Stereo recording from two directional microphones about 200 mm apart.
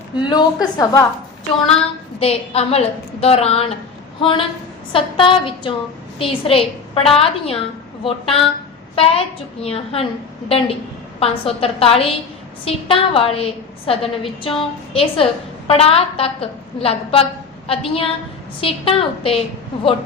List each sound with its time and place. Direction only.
0.2 s a woman's voice: 20° left (ahead or behind)
2.1 s a woman's voice: 30° left (ahead or behind)